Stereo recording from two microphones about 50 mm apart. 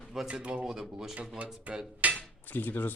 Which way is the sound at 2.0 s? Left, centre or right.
Right.